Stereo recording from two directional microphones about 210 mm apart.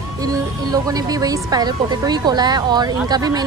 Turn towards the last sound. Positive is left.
turn(degrees=-20)  # may be behind; listen again after turning